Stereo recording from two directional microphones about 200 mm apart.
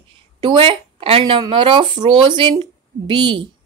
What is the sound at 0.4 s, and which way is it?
Speech, 25° right (ahead or behind).